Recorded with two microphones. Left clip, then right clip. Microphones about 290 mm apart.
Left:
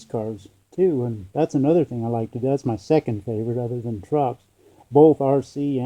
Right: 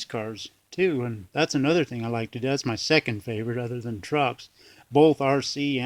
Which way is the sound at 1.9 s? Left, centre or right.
Right.